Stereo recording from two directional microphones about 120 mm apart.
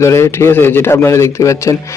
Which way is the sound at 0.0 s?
25° left (ahead or behind).